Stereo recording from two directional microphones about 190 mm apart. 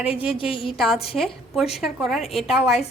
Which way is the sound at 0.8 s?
5° right (ahead or behind).